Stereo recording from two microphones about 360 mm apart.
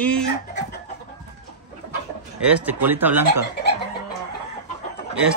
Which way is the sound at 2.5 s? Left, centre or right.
Centre.